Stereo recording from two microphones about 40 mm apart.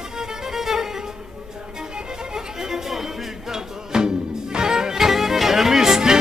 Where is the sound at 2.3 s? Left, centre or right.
Centre.